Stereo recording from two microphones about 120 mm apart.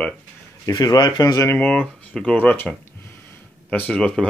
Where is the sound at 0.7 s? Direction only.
35° left (ahead or behind).